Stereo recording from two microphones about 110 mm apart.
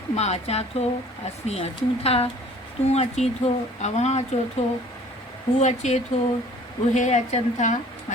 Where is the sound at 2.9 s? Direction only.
80° left.